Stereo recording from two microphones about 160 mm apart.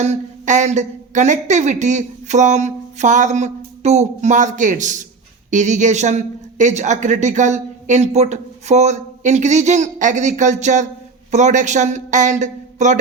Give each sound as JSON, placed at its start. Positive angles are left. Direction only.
{"t": 0.0, "sound": "speech", "side_deg": -45}